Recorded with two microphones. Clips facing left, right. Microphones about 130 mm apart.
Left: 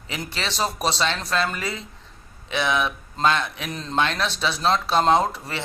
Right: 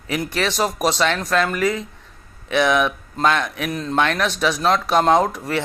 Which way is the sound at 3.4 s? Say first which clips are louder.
Right 6 dB; 50° right (ahead or behind).